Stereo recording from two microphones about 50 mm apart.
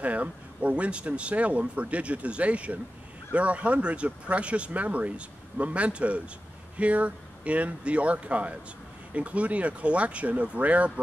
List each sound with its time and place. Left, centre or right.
0.0 s speech: right